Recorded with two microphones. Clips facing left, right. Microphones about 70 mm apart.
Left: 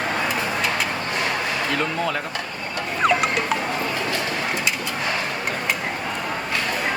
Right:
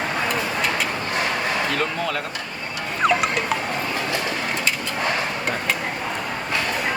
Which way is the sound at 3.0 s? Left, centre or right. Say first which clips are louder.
Even; centre.